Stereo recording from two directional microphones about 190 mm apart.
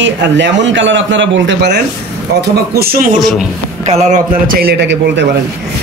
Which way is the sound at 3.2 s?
Centre (ahead or behind).